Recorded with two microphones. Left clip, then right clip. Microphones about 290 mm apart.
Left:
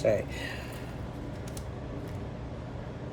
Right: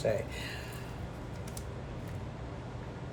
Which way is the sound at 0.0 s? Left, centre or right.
Left.